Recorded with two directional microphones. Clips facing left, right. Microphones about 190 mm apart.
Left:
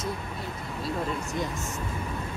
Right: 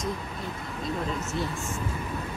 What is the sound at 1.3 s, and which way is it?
Speech, 15° left (ahead or behind).